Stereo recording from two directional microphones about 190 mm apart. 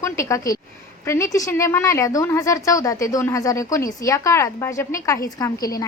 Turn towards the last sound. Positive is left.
turn(degrees=20)  # may be behind; listen again after turning